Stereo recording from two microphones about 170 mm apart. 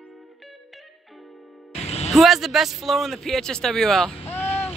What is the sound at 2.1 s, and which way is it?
Speech, centre (ahead or behind).